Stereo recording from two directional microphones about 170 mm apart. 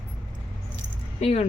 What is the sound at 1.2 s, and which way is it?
Speech, 40° left (ahead or behind).